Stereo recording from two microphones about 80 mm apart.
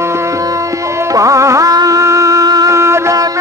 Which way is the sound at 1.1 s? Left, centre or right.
Right.